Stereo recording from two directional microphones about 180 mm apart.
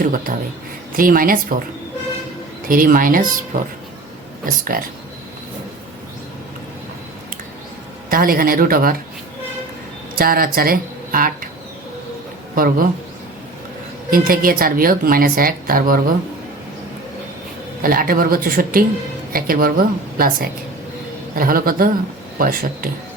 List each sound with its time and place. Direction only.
0.0 s speech: 50° right (ahead or behind)
2.6 s speech: 50° right (ahead or behind)
4.7 s speech: 55° right (ahead or behind)
8.1 s speech: 55° right (ahead or behind)
10.2 s speech: 55° right (ahead or behind)
14.1 s speech: 55° right (ahead or behind)
17.8 s speech: 50° right (ahead or behind)